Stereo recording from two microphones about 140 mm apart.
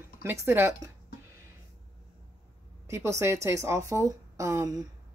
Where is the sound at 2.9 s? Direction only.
20° right (ahead or behind).